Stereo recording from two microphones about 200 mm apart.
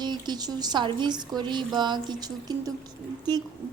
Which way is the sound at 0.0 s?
20° right (ahead or behind).